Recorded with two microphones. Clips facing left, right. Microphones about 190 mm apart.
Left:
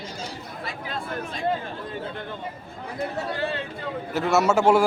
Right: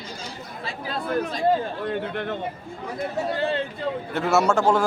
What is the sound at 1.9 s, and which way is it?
Speech, 70° right (ahead or behind).